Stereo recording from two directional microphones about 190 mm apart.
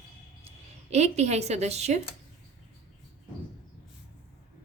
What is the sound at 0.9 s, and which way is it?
A woman's voice, 35° right (ahead or behind).